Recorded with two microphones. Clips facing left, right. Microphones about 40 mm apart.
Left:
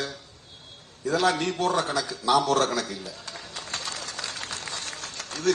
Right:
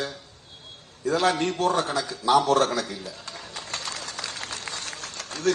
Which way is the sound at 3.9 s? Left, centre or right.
Right.